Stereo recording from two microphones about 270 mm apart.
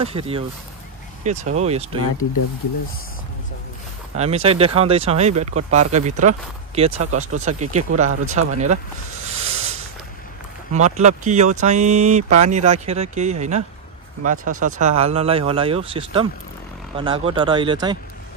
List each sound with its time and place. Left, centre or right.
0.0 s speech: right
4.2 s speech: right
9.2 s a sound: right
10.7 s speech: right